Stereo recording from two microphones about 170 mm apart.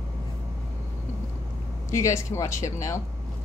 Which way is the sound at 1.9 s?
15° left (ahead or behind).